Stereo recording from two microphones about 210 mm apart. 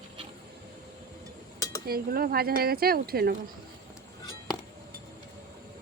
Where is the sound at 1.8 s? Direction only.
45° right (ahead or behind).